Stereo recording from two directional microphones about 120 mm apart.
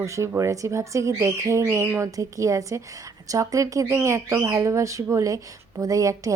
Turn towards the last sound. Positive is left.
turn(degrees=-30)  # may be behind; listen again after turning